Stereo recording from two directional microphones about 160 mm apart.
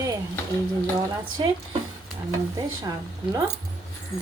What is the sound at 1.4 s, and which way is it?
Speech, 30° right (ahead or behind).